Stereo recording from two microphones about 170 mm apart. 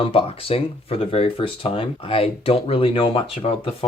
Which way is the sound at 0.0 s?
35° left (ahead or behind).